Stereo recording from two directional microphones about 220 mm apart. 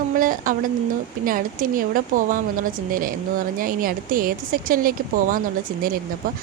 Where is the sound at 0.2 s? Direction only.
40° right (ahead or behind).